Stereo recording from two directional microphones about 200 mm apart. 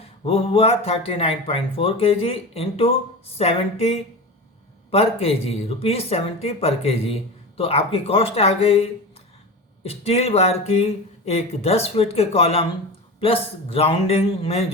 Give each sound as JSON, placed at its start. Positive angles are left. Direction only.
{"t": 0.0, "sound": "speech", "side_deg": 30}